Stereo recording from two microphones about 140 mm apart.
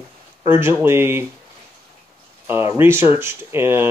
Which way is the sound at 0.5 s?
15° right (ahead or behind).